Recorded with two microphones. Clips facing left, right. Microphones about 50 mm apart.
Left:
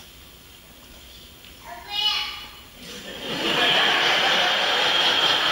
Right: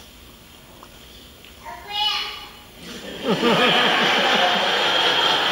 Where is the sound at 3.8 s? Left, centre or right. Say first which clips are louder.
Right 2 dB; centre.